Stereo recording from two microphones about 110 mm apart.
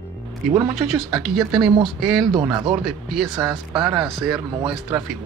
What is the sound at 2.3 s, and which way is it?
Speech, 40° right (ahead or behind).